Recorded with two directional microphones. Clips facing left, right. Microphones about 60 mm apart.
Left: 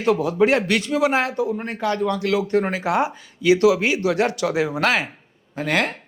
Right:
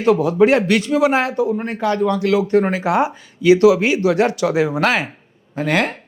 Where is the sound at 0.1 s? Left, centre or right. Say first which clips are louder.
Right 4 dB; right.